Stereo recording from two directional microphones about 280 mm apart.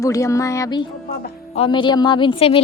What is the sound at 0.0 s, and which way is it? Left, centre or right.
Speech, centre.